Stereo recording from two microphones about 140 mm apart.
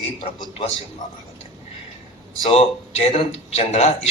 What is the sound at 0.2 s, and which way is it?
Speech, 35° left (ahead or behind).